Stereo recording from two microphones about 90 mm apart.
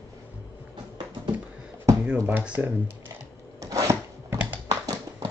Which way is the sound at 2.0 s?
20° right (ahead or behind).